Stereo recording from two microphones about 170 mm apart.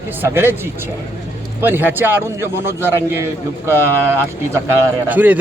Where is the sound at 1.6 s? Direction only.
10° right (ahead or behind).